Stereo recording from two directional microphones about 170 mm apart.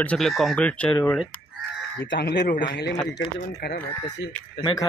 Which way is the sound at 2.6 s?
90° left.